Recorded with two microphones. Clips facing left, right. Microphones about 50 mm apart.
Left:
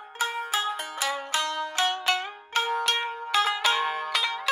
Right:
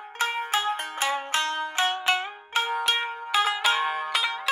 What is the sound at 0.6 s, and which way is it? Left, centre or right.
Music, right.